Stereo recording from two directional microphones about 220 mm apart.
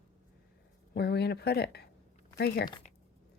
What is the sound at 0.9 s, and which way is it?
Speech, 45° left (ahead or behind).